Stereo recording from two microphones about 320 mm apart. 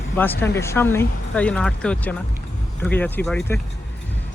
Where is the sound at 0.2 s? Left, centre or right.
Centre.